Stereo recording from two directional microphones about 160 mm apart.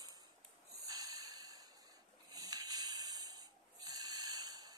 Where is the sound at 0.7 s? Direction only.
25° right (ahead or behind).